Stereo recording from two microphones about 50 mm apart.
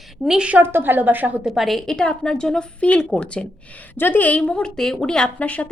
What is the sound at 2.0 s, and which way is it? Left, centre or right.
A woman's voice, centre.